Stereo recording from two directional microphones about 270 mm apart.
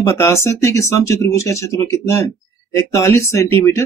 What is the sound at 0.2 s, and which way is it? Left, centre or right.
Speech, centre.